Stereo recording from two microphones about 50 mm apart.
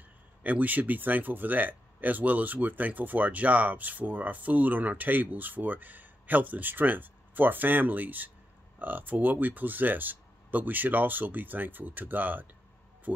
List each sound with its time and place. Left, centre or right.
0.4 s speech: right